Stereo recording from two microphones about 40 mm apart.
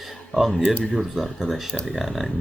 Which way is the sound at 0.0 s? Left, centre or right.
Centre.